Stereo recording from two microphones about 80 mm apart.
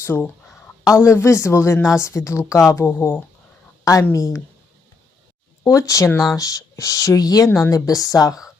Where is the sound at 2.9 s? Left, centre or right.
Left.